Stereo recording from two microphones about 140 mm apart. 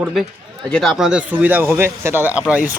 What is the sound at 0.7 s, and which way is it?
Speech, 5° left (ahead or behind).